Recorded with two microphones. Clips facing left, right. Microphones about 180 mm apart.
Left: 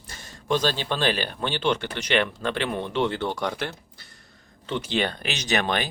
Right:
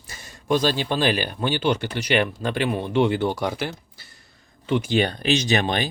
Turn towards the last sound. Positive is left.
turn(degrees=-30)  # may be behind; listen again after turning